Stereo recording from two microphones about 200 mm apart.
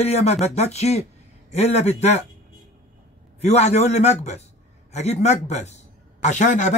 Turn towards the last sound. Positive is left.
turn(degrees=35)  # may be behind; listen again after turning